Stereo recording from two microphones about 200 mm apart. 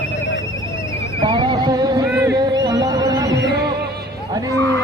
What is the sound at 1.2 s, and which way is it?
Neigh, 25° right (ahead or behind).